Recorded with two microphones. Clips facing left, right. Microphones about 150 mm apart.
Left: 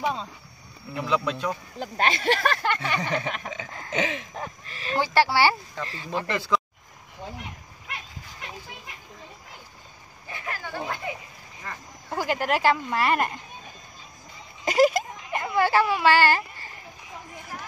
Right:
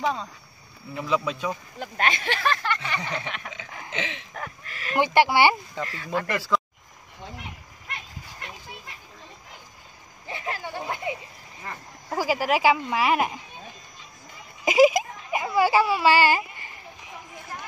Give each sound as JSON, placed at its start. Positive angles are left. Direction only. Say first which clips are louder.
{"t": 0.0, "sound": "speech", "louder": "right 1 dB", "side_deg": 15}
{"t": 0.9, "sound": "speech", "louder": "even", "side_deg": -5}
{"t": 1.8, "sound": "speech", "louder": "left 2 dB", "side_deg": 35}
{"t": 2.6, "sound": "a sound", "louder": "left 3 dB", "side_deg": 55}
{"t": 4.3, "sound": "speech", "louder": "left 1 dB", "side_deg": 25}
{"t": 4.9, "sound": "speech", "louder": "right 2 dB", "side_deg": -20}
{"t": 6.3, "sound": "speech", "louder": "left 1 dB", "side_deg": -5}
{"t": 10.2, "sound": "a sound", "louder": "right 3 dB", "side_deg": -25}
{"t": 12.1, "sound": "speech", "louder": "right 2 dB", "side_deg": -5}
{"t": 14.6, "sound": "a sound", "louder": "right 2 dB", "side_deg": -10}